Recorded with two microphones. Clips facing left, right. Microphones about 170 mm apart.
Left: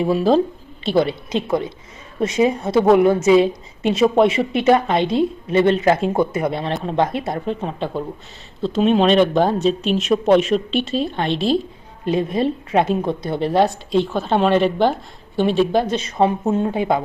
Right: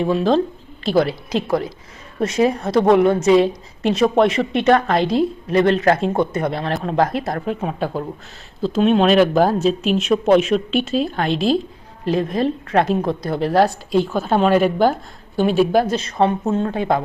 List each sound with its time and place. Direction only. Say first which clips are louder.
0.0 s a woman's voice: left 1 dB; 5° left (ahead or behind)
16.4 s speech: left 1 dB; 15° left (ahead or behind)